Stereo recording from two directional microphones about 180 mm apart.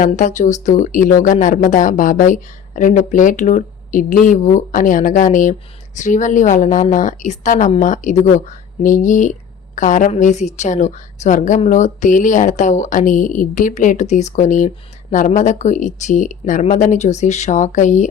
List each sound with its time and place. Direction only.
0.0 s speech: 45° left (ahead or behind)